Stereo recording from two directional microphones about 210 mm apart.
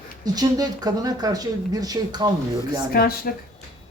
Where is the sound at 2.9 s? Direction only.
45° left (ahead or behind).